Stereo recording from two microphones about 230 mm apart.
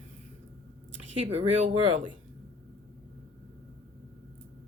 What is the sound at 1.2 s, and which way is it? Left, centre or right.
Speech, right.